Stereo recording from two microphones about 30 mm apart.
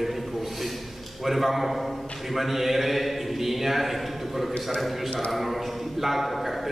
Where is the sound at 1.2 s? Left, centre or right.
Centre.